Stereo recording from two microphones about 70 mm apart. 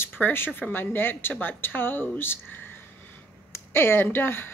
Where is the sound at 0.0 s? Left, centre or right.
Left.